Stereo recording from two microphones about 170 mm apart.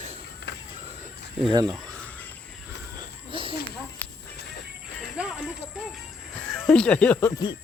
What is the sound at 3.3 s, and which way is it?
Snake, 30° right (ahead or behind).